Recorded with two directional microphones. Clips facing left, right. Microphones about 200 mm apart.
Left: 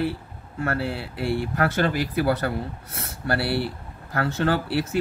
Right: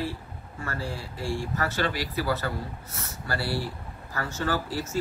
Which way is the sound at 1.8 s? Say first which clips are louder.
Left 6 dB; 55° left (ahead or behind).